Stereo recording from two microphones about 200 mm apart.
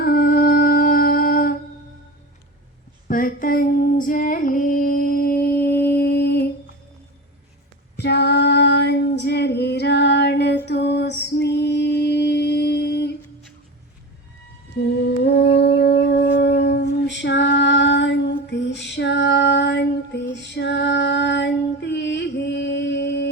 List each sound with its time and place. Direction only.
0.0 s humming: 50° left (ahead or behind)
3.1 s female singing: 45° left (ahead or behind)
7.9 s female singing: 55° left (ahead or behind)
10.7 s music: 55° left (ahead or behind)
15.0 s humming: 55° left (ahead or behind)
20.3 s female singing: 60° left (ahead or behind)